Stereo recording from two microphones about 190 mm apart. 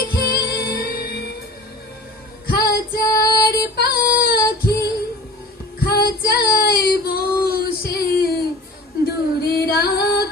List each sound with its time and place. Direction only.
0.0 s music: 55° left (ahead or behind)
2.5 s female singing: 55° left (ahead or behind)
5.8 s child singing: 55° left (ahead or behind)
9.0 s singing: 55° left (ahead or behind)